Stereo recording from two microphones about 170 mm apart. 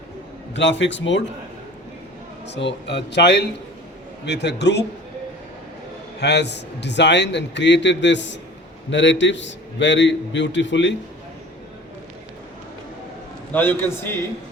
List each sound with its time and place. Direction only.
0.5 s a man's voice: 90° left
2.5 s a man's voice: 90° left
6.1 s a man's voice: 80° left
13.5 s a man's voice: 10° left (ahead or behind)